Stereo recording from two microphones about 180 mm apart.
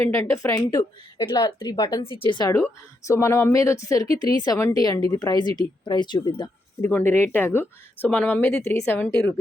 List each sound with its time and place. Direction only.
0.4 s a woman's voice: 20° left (ahead or behind)
3.1 s a woman's voice: 15° left (ahead or behind)
6.8 s speech: 10° left (ahead or behind)